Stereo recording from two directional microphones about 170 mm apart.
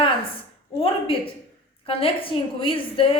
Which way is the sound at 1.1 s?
35° left (ahead or behind).